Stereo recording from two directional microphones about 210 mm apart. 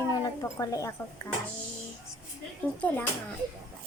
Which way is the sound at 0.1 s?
15° left (ahead or behind).